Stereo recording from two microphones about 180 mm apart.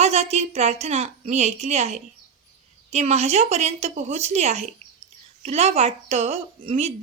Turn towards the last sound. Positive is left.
turn(degrees=-35)  # may be behind; listen again after turning